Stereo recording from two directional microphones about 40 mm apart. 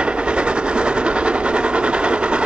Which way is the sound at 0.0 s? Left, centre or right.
Right.